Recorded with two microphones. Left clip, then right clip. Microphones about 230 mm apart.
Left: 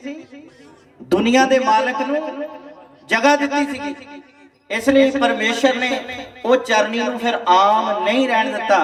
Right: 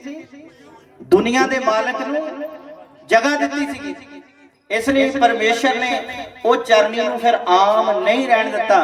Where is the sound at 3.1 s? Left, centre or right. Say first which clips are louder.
Even; left.